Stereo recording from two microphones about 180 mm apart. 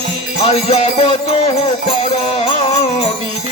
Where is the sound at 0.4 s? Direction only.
35° left (ahead or behind).